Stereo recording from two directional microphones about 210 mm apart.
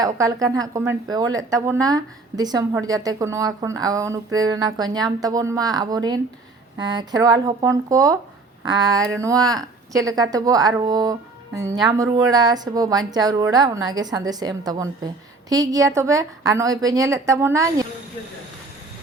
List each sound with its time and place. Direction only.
0.0 s speech: 15° right (ahead or behind)